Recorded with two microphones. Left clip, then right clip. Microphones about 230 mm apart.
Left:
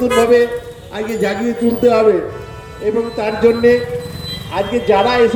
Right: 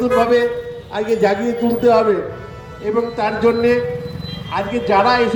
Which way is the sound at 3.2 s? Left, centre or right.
Centre.